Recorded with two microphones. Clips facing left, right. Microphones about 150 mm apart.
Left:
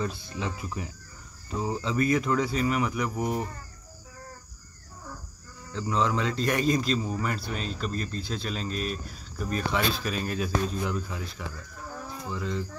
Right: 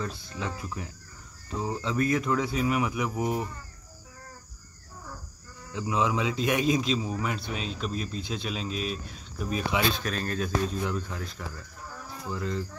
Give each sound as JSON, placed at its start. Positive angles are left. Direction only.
{"t": 0.0, "sound": "speech", "side_deg": 5}
{"t": 5.7, "sound": "speech", "side_deg": -10}